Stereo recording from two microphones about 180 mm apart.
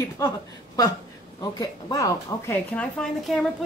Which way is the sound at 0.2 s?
15° left (ahead or behind).